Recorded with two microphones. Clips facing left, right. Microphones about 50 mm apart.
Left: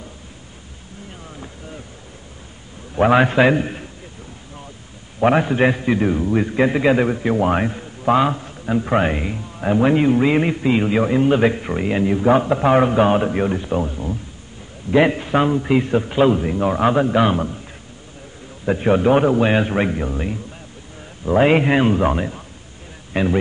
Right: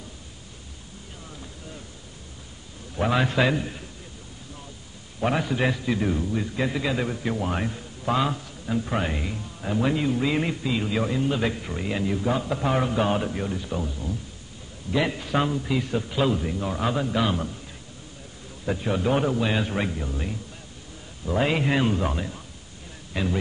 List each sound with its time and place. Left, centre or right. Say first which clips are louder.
3.0 s a man's voice: left 9 dB; left
5.2 s a man's voice: left 9 dB; left
6.2 s a man's voice: left 9 dB; left
18.7 s a man's voice: left 9 dB; left